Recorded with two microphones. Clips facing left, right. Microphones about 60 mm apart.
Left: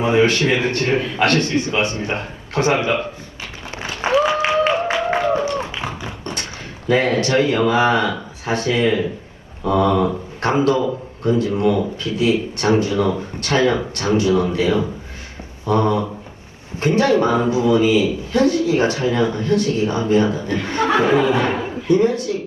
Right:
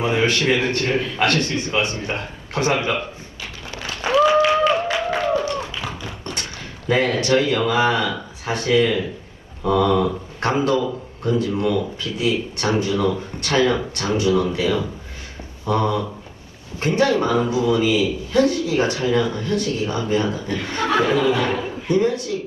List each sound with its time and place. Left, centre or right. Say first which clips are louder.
0.0 s a man's voice: left 4 dB; left
3.8 s applause: even; left
6.9 s speech: left 2 dB; left